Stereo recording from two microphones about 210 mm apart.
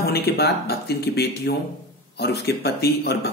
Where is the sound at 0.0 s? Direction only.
50° left (ahead or behind).